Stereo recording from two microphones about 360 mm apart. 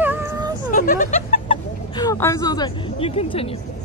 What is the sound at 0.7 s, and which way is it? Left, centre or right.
Speech, left.